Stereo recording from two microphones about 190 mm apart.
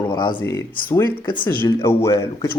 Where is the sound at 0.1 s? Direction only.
25° left (ahead or behind).